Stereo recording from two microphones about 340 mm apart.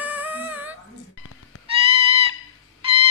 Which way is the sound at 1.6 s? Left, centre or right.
Centre.